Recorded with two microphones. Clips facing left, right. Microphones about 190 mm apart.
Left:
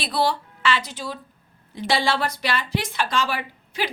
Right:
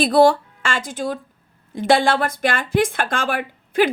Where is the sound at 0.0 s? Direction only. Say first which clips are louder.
Right 10 dB; 50° right (ahead or behind).